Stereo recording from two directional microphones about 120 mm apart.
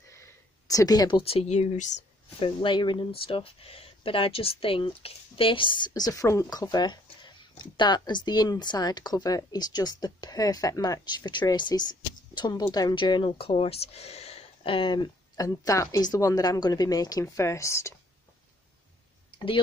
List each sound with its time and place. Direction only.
0.1 s a sound: 25° left (ahead or behind)
1.1 s speech: 55° left (ahead or behind); by 2.0 s 75° left (ahead or behind)
2.4 s speech: 40° left (ahead or behind); by 17.9 s 25° left (ahead or behind)
19.3 s clicking: 45° left (ahead or behind)